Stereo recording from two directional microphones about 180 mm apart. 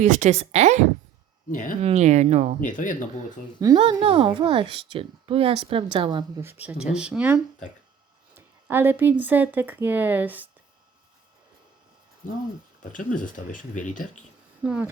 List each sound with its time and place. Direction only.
0.0 s a woman's voice: 40° right (ahead or behind)
1.5 s speech: 45° left (ahead or behind)
1.8 s a woman's voice: 35° right (ahead or behind)
2.6 s speech: 45° left (ahead or behind)
3.6 s a woman's voice: 25° right (ahead or behind)
6.4 s speech: 10° right (ahead or behind)
12.9 s speech: 45° left (ahead or behind)
14.6 s speech: 5° right (ahead or behind)